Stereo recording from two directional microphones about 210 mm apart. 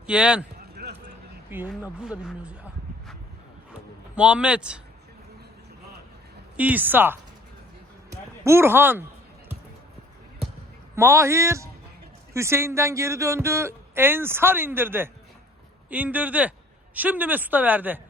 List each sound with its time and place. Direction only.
0.1 s speech: 5° right (ahead or behind)
0.8 s vehicle: 50° right (ahead or behind)
1.5 s speech: 10° right (ahead or behind)
4.1 s speech: 5° right (ahead or behind)
6.6 s speech: 10° right (ahead or behind)
8.4 s speech: 10° right (ahead or behind)
10.9 s speech: 15° right (ahead or behind)